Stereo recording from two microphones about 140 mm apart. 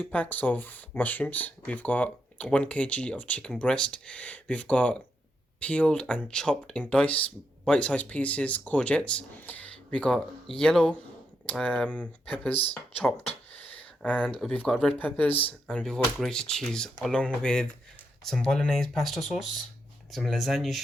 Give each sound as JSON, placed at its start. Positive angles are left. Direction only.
{"t": 0.0, "sound": "speech", "side_deg": 10}
{"t": 14.0, "sound": "speech", "side_deg": 10}
{"t": 15.3, "sound": "speech", "side_deg": 40}
{"t": 15.6, "sound": "speech", "side_deg": 5}